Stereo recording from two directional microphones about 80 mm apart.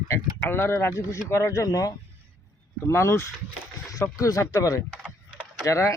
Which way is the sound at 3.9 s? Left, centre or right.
Left.